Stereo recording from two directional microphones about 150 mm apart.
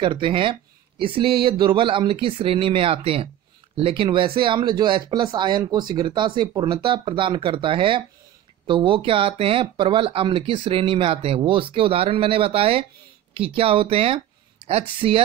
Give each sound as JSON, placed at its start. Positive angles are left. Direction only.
{"t": 0.0, "sound": "speech", "side_deg": -35}